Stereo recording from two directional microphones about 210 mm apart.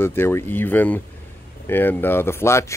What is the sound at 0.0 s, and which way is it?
Speech, 10° left (ahead or behind).